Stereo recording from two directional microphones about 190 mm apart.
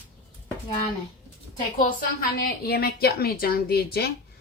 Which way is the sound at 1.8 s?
50° left (ahead or behind).